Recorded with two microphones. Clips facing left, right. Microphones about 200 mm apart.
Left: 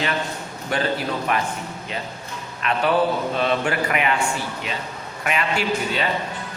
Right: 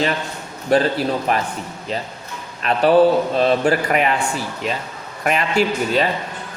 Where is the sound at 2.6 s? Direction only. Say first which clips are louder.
Right 7 dB; 35° right (ahead or behind).